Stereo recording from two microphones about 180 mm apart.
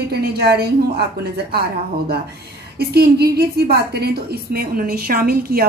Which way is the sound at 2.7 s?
60° right (ahead or behind).